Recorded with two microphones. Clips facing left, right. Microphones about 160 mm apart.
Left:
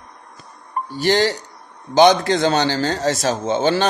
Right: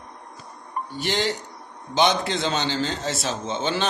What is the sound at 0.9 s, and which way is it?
Speech, 40° left (ahead or behind).